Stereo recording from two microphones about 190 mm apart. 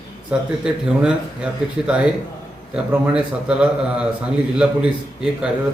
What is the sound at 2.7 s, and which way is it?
Speech, 5° right (ahead or behind).